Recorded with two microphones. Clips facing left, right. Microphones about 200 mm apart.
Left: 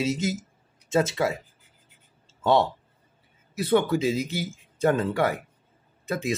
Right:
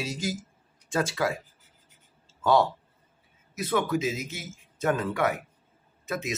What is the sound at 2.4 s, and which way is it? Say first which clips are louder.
A man's voice: left 1 dB; 25° left (ahead or behind).